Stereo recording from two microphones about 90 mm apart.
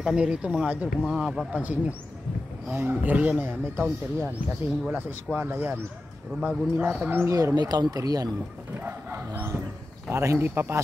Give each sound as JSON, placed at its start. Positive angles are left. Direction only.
{"t": 0.0, "sound": "speech", "side_deg": -10}
{"t": 1.5, "sound": "a man's voice", "side_deg": -15}
{"t": 6.4, "sound": "speech", "side_deg": -10}
{"t": 7.2, "sound": "speech", "side_deg": -35}
{"t": 8.7, "sound": "a sound", "side_deg": -25}
{"t": 10.1, "sound": "a man's voice", "side_deg": -30}